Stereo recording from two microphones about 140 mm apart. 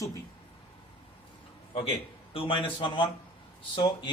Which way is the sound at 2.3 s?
40° left (ahead or behind).